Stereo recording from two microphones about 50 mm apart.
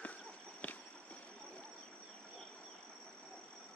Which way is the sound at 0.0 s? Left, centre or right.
Left.